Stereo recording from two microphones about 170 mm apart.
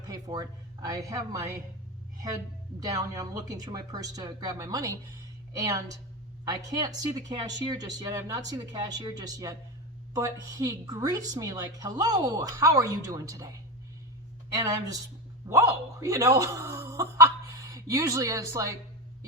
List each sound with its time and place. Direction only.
0.0 s a woman's voice: 20° right (ahead or behind)
2.8 s a woman's voice: 20° right (ahead or behind)